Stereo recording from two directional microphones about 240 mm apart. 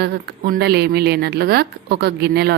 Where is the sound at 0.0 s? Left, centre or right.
Right.